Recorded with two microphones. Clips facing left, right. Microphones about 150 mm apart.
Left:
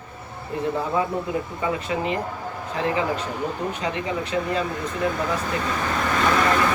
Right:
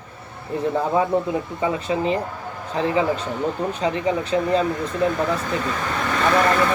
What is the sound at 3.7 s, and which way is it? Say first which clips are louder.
Speech: right 5 dB; 30° right (ahead or behind).